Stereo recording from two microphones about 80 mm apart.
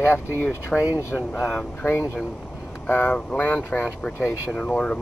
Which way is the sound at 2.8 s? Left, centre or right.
Left.